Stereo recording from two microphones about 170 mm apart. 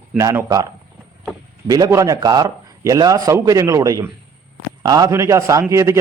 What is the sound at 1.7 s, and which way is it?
A man's voice, 20° right (ahead or behind).